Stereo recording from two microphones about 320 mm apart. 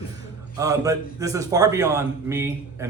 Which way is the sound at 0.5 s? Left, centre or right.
Centre.